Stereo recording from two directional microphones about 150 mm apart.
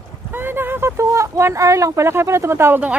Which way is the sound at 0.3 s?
15° right (ahead or behind).